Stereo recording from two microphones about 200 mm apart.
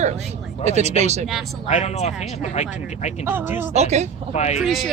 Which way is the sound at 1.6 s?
35° left (ahead or behind).